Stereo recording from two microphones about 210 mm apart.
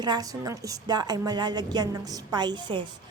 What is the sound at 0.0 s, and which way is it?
A woman's voice, 20° right (ahead or behind).